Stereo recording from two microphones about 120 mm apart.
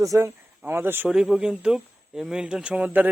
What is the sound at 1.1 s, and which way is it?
Speech, 5° right (ahead or behind).